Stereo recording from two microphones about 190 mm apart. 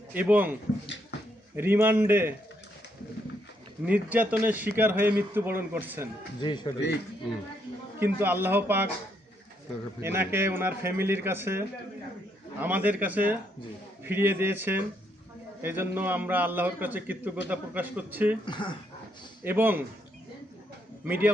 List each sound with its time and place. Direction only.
0.1 s a man's voice: 10° right (ahead or behind)
1.5 s a man's voice: 10° right (ahead or behind)
3.8 s a man's voice: 10° right (ahead or behind)
6.4 s speech: 25° left (ahead or behind)
7.9 s a man's voice: 10° right (ahead or behind)
10.0 s a man's voice: 15° right (ahead or behind)
18.4 s speech: 25° left (ahead or behind)
19.5 s a man's voice: 10° right (ahead or behind)
21.0 s a man's voice: 10° right (ahead or behind)